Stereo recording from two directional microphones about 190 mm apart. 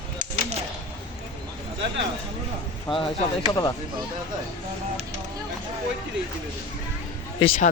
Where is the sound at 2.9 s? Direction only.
5° left (ahead or behind).